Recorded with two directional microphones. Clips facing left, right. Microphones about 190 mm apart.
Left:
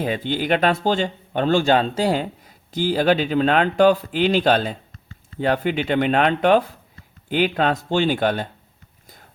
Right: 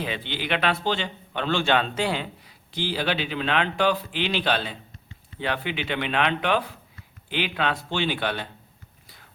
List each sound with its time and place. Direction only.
0.0 s speech: 45° left (ahead or behind)